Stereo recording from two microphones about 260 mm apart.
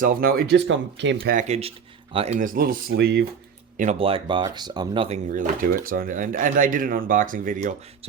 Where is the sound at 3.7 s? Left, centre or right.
Right.